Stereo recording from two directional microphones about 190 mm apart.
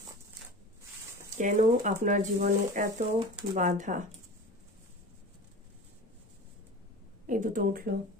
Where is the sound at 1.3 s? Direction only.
40° right (ahead or behind).